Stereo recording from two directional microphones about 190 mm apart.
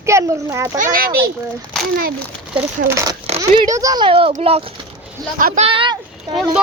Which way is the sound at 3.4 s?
20° right (ahead or behind).